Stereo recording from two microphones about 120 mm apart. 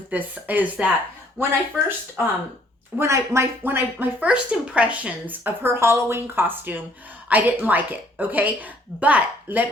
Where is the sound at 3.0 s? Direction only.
25° right (ahead or behind).